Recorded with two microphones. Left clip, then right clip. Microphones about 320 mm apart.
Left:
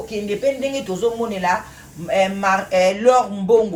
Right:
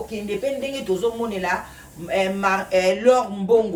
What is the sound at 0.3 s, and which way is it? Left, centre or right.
Speech, left.